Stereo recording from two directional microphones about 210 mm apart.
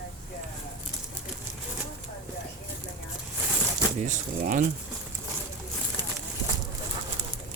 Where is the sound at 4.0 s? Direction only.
35° right (ahead or behind).